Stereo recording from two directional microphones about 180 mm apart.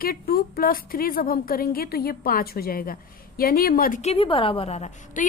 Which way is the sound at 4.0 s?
35° left (ahead or behind).